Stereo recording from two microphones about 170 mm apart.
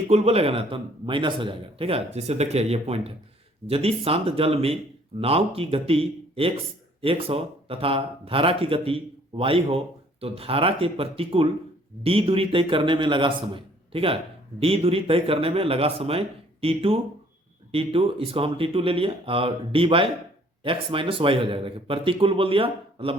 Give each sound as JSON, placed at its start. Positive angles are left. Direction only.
{"t": 0.1, "sound": "speech", "side_deg": -40}